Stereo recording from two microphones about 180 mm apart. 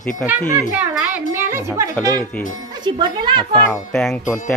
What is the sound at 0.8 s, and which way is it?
Music, 10° right (ahead or behind).